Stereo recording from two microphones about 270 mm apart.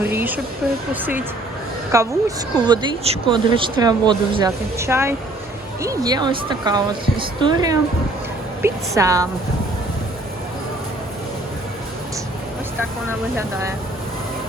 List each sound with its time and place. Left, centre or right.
0.0 s a woman's voice: centre
1.9 s a woman's voice: centre
13.3 s a woman's voice: centre